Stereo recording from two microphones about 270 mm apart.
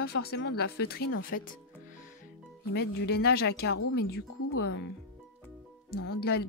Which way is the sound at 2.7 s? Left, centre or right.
Left.